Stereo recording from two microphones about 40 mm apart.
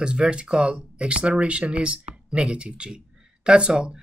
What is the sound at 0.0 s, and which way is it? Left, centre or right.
Speech, right.